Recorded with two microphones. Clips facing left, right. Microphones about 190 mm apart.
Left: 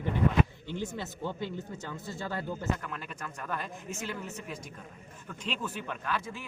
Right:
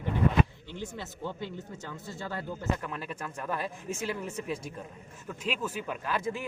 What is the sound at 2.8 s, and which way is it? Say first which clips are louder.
Speech: right 3 dB; 5° right (ahead or behind).